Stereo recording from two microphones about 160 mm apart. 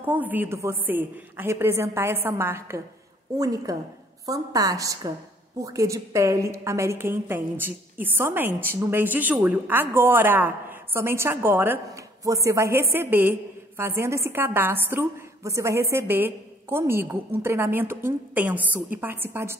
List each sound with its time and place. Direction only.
0.0 s a woman's voice: 10° right (ahead or behind)